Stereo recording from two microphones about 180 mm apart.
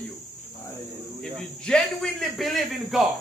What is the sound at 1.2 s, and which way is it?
A man's voice, 5° left (ahead or behind).